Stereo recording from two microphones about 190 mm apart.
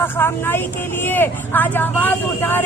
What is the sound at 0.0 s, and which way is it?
Speech, 10° left (ahead or behind).